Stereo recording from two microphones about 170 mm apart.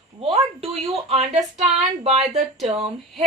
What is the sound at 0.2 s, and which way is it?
A woman's voice, 35° right (ahead or behind).